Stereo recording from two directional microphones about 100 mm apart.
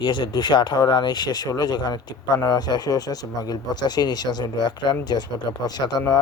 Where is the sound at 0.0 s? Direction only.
50° left (ahead or behind).